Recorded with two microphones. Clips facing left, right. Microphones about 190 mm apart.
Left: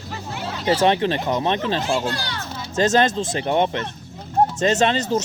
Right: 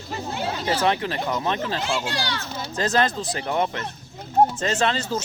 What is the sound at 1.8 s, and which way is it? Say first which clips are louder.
Speech: left 4 dB; 35° left (ahead or behind).